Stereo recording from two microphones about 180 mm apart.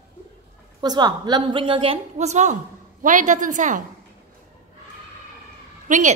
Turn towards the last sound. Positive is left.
turn(degrees=-45)  # may be behind; listen again after turning